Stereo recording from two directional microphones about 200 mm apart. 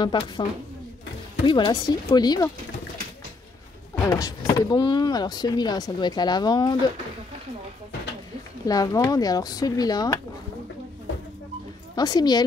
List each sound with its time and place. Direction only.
0.0 s speech: 25° left (ahead or behind)
3.9 s speech: 15° left (ahead or behind)
8.6 s speech: 20° left (ahead or behind)
11.9 s speech: 20° left (ahead or behind)